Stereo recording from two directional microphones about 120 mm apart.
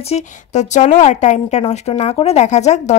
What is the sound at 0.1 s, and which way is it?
A woman's voice, 75° left (ahead or behind).